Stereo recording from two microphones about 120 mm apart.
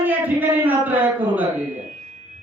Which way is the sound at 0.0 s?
15° right (ahead or behind).